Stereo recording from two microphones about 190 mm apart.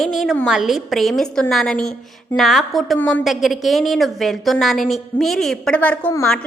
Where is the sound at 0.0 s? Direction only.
Centre (ahead or behind).